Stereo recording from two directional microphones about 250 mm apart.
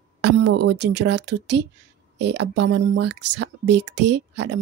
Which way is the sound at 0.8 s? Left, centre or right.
Right.